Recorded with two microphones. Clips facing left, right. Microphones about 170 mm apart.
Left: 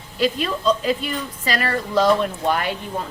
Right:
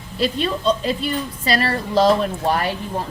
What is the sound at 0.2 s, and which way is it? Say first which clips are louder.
A woman's voice: even; 30° right (ahead or behind).